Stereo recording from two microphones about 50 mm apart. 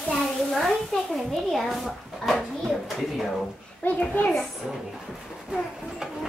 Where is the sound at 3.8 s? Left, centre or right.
Left.